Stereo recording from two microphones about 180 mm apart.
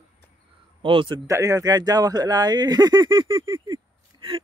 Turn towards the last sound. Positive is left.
turn(degrees=-25)  # may be behind; listen again after turning